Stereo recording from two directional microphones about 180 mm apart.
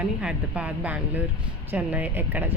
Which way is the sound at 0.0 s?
5° right (ahead or behind).